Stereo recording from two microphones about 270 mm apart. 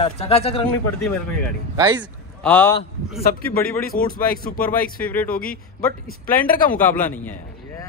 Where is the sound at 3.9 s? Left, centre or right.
Left.